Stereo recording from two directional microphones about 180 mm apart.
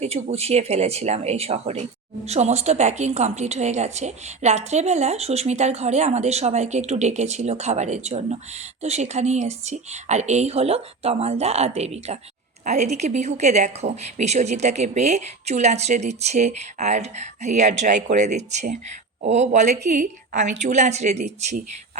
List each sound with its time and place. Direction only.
0.0 s a woman's voice: 35° right (ahead or behind)